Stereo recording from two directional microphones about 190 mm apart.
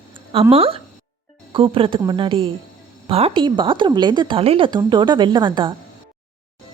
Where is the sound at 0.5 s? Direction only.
30° right (ahead or behind).